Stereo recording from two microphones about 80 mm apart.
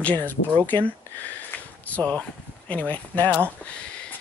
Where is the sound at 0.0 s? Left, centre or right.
Centre.